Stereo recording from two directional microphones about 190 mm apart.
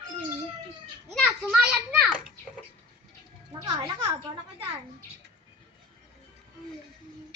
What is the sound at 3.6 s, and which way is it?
Music, 25° right (ahead or behind).